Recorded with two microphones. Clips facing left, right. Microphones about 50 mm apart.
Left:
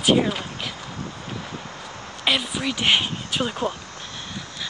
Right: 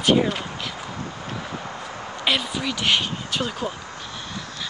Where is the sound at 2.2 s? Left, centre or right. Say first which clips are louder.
Left 1 dB; centre.